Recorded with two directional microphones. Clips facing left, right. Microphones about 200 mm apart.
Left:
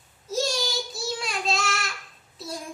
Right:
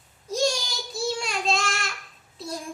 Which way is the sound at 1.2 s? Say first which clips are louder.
Right 1 dB; centre (ahead or behind).